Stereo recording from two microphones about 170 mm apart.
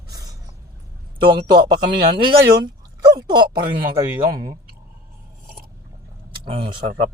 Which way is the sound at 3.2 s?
25° right (ahead or behind).